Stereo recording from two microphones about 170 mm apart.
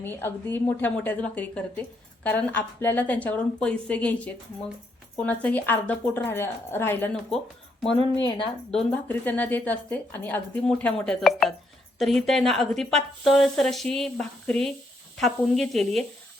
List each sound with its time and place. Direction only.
0.0 s speech: 15° left (ahead or behind)
8.7 s speech: 10° left (ahead or behind)